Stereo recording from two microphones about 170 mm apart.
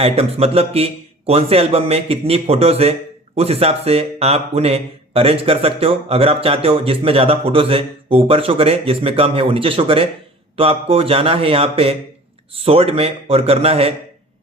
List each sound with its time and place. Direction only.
0.0 s speech: 35° right (ahead or behind)